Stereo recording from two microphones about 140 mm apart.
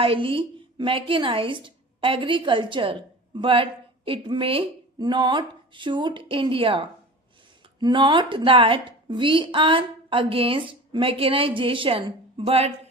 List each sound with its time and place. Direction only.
0.0 s a woman's voice: 40° right (ahead or behind)